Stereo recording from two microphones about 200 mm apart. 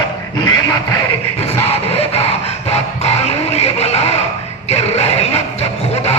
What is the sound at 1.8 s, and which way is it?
Music, 30° left (ahead or behind).